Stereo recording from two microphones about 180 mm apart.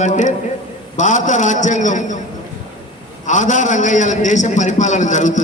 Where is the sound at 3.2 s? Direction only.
45° left (ahead or behind).